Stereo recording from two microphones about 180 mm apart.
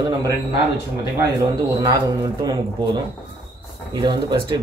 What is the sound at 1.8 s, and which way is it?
Speech, 20° right (ahead or behind).